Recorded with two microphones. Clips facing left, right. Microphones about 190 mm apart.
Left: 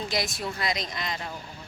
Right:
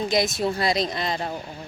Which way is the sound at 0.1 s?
20° right (ahead or behind).